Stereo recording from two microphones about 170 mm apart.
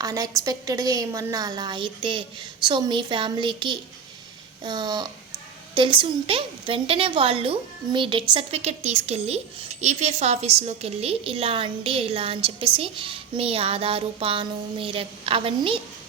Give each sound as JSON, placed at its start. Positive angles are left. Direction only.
{"t": 0.0, "sound": "a woman's voice", "side_deg": -20}